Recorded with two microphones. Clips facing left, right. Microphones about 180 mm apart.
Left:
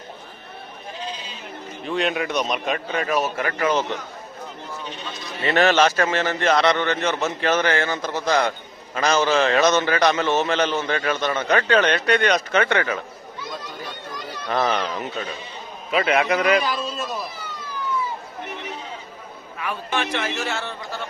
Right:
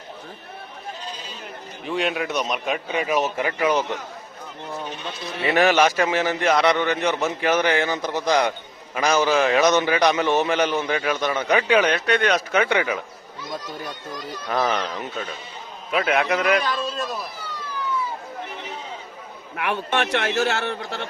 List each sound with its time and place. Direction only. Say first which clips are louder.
1.9 s a man's voice: left 1 dB; 5° right (ahead or behind)
5.4 s a man's voice: even; 10° right (ahead or behind)
14.5 s a man's voice: left 1 dB; centre (ahead or behind)
19.5 s a man's voice: right 3 dB; 75° right (ahead or behind)